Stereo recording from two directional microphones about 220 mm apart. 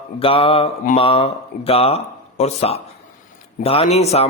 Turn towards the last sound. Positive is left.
turn(degrees=30)  # may be behind; listen again after turning